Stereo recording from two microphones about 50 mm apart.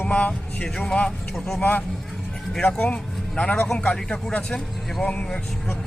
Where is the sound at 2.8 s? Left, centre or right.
Left.